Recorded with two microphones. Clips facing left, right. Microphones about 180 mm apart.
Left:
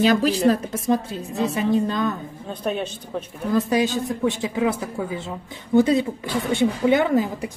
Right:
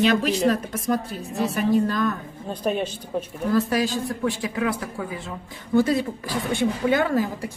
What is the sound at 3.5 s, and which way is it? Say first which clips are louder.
A woman's voice: left 2 dB; 20° left (ahead or behind).